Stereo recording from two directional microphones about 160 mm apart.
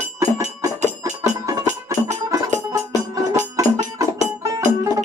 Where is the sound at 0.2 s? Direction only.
20° right (ahead or behind).